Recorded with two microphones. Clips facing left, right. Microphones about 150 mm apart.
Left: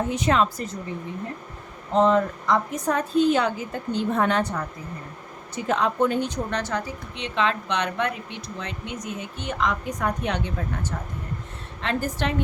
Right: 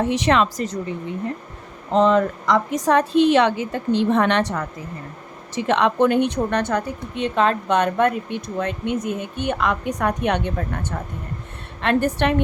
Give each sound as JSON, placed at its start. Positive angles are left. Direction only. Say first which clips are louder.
{"t": 0.0, "sound": "a woman's voice", "louder": "right 3 dB", "side_deg": -80}
{"t": 1.9, "sound": "a woman's voice", "louder": "right 3 dB", "side_deg": -90}
{"t": 5.5, "sound": "speech", "louder": "right 5 dB", "side_deg": -80}
{"t": 11.8, "sound": "speech", "louder": "right 7 dB", "side_deg": -60}